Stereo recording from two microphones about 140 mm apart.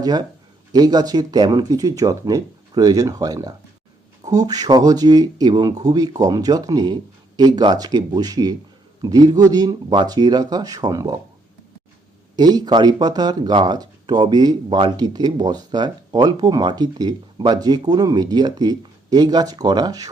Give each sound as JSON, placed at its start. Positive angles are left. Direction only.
{"t": 0.0, "sound": "speech", "side_deg": -30}
{"t": 12.4, "sound": "speech", "side_deg": -30}